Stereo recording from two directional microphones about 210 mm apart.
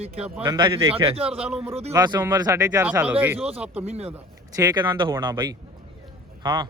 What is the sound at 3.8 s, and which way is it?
Speech, 30° right (ahead or behind).